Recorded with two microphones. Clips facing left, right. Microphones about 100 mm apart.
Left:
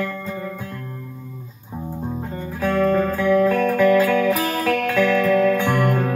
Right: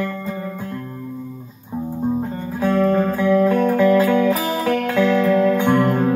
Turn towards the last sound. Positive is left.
turn(degrees=-15)  # may be behind; listen again after turning